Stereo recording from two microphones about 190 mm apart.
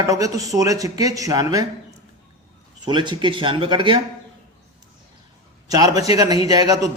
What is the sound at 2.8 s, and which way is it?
A man's voice, 25° right (ahead or behind).